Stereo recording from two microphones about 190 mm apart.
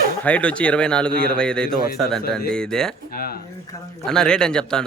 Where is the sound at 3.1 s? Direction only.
50° left (ahead or behind).